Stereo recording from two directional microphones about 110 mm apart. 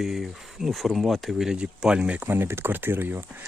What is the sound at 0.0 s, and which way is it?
Speech, centre (ahead or behind).